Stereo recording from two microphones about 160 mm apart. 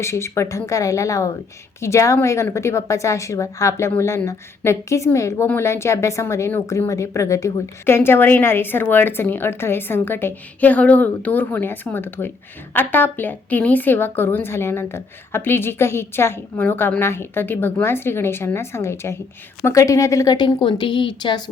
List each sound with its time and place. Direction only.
0.0 s a woman's voice: 15° left (ahead or behind)